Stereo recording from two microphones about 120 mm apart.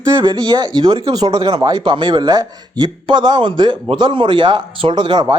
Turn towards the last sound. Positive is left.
turn(degrees=-40)  # may be behind; listen again after turning